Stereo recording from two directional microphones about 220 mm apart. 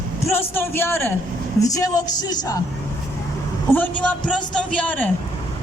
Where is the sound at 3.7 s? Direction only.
10° left (ahead or behind).